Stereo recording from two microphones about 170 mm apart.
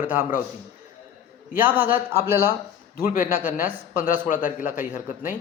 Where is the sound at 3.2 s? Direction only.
10° right (ahead or behind).